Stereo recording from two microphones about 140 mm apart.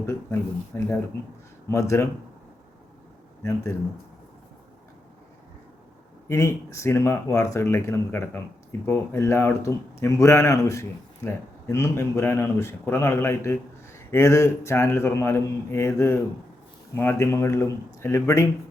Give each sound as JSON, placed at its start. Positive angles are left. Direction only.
{"t": 0.0, "sound": "speech", "side_deg": 20}
{"t": 6.2, "sound": "a man's voice", "side_deg": 20}